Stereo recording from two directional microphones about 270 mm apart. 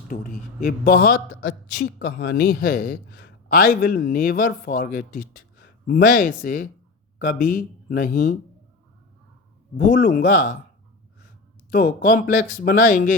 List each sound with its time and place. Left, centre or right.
0.1 s speech: left
9.7 s speech: left
11.7 s speech: left